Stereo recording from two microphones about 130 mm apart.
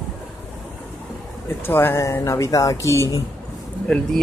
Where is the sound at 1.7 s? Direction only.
15° left (ahead or behind).